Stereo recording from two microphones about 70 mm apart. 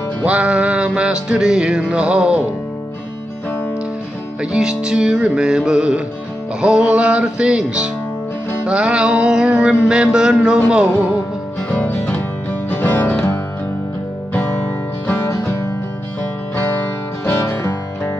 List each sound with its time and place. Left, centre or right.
0.2 s music: centre
4.4 s music: centre
11.7 s music: left
15.1 s music: left
16.5 s music: left
17.4 s music: left